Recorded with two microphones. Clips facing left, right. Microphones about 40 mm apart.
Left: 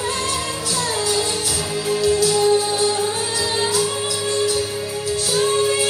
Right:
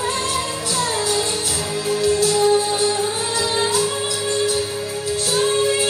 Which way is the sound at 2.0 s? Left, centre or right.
Right.